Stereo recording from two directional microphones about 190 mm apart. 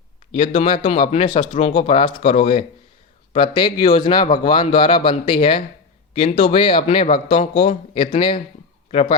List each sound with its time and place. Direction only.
0.3 s speech: 35° left (ahead or behind)
3.3 s speech: 25° left (ahead or behind)